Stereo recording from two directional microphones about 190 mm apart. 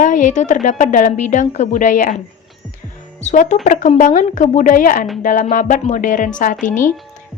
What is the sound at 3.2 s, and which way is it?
A woman's voice, 40° left (ahead or behind).